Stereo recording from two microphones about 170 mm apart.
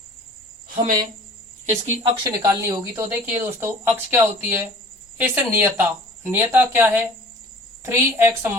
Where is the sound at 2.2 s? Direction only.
15° right (ahead or behind).